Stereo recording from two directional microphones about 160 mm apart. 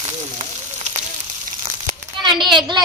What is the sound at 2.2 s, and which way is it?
Speech, 30° right (ahead or behind).